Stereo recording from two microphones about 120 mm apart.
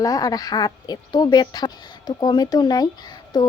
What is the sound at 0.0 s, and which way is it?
Speech, 30° left (ahead or behind).